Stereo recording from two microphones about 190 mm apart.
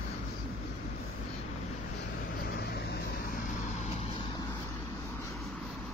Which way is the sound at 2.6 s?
55° left (ahead or behind).